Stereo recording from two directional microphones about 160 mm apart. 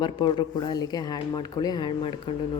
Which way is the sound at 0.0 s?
30° left (ahead or behind).